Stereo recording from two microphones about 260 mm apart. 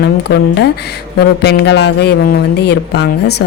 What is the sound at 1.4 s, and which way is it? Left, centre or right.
A woman's voice, left.